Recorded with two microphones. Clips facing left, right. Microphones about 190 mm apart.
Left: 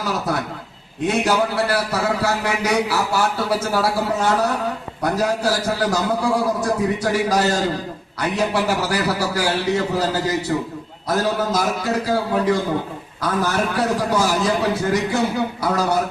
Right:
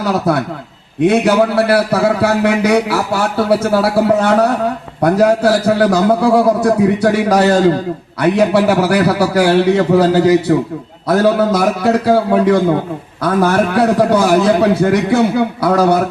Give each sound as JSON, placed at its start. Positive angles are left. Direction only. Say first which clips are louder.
{"t": 0.0, "sound": "a man's voice", "louder": "right 8 dB", "side_deg": -65}